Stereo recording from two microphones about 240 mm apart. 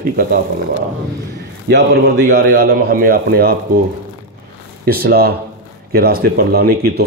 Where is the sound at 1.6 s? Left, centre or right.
Right.